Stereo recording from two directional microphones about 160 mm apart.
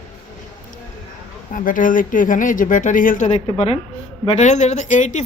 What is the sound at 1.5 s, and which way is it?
A woman's voice, 55° left (ahead or behind).